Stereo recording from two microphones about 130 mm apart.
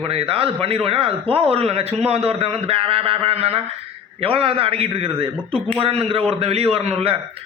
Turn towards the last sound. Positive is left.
turn(degrees=-50)  # may be behind; listen again after turning